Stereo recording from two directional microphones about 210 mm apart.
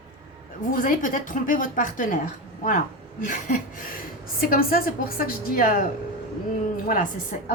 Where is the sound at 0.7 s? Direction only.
40° left (ahead or behind).